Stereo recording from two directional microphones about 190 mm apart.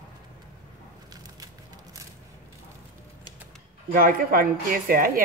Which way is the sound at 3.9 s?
50° right (ahead or behind).